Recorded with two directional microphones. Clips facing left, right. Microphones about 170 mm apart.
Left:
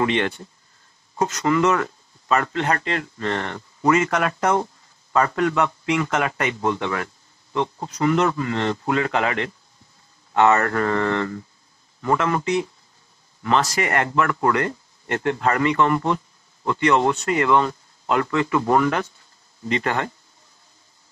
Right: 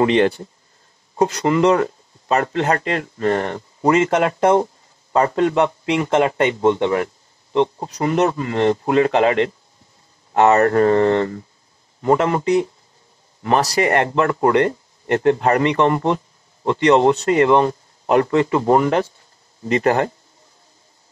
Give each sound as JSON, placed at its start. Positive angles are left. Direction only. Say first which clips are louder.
{"t": 0.0, "sound": "speech", "louder": "right 6 dB", "side_deg": -35}
{"t": 10.5, "sound": "a man's voice", "louder": "right 7 dB", "side_deg": -25}